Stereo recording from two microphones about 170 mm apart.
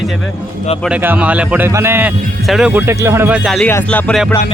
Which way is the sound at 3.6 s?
10° left (ahead or behind).